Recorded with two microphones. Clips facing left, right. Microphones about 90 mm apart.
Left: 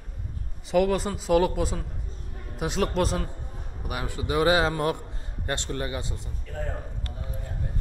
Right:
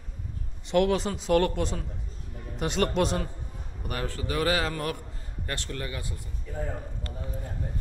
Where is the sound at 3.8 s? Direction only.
10° left (ahead or behind).